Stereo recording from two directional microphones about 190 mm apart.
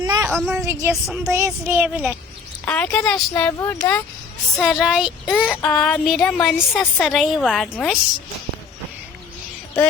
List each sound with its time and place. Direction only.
0.0 s a sound: 20° right (ahead or behind)
0.3 s speech: 5° right (ahead or behind)
2.6 s a woman's voice: 10° left (ahead or behind)